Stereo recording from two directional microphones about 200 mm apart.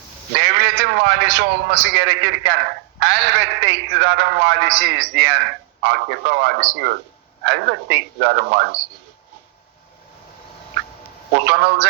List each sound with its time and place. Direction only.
0.3 s a man's voice: 55° right (ahead or behind)
11.3 s a man's voice: 55° right (ahead or behind)